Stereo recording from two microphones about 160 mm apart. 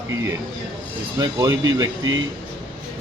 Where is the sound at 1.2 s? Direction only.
25° right (ahead or behind).